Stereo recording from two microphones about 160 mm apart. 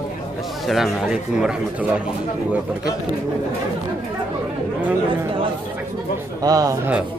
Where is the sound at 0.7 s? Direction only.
Centre (ahead or behind).